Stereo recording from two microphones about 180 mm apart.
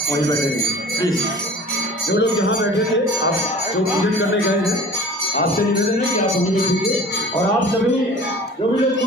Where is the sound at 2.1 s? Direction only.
75° left (ahead or behind).